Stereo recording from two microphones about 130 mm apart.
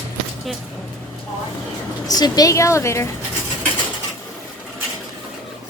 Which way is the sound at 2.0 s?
30° left (ahead or behind).